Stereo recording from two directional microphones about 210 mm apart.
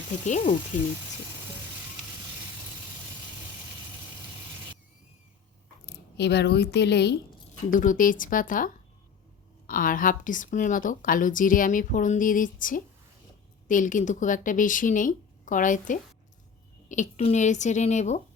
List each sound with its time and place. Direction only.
0.3 s a woman's voice: 35° left (ahead or behind)
5.8 s speech: 55° left (ahead or behind)
7.7 s a woman's voice: 40° left (ahead or behind)